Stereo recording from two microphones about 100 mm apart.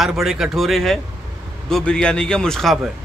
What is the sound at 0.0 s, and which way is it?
A man's voice, centre (ahead or behind).